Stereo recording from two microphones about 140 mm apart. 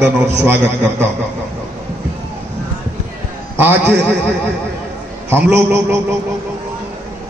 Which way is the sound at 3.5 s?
15° right (ahead or behind).